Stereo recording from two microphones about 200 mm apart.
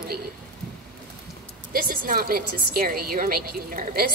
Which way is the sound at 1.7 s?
45° right (ahead or behind).